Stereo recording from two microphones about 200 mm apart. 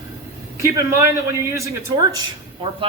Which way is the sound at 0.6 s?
15° right (ahead or behind).